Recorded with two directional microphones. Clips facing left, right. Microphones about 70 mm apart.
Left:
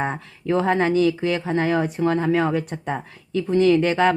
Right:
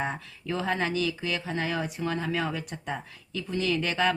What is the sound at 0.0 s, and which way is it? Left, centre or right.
Speech, left.